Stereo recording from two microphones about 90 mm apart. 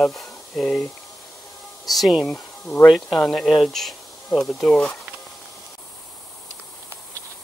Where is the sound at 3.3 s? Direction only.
Centre (ahead or behind).